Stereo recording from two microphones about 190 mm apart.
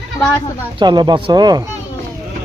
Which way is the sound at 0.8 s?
20° right (ahead or behind).